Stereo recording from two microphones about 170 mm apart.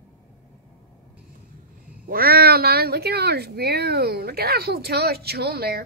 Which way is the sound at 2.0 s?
60° right (ahead or behind).